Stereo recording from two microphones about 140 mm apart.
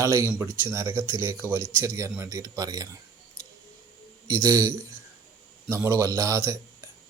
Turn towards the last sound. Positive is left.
turn(degrees=-20)  # may be behind; listen again after turning